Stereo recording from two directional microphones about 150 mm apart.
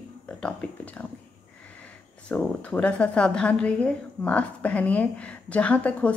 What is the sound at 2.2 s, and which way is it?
A woman's voice, 10° left (ahead or behind).